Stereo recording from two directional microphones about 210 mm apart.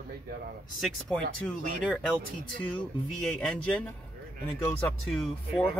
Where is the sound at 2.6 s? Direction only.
5° left (ahead or behind).